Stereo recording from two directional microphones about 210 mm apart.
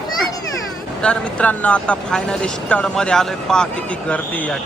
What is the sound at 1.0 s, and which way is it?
Speech, 5° left (ahead or behind).